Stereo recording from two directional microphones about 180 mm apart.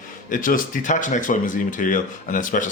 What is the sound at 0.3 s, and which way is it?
Speech, 50° left (ahead or behind).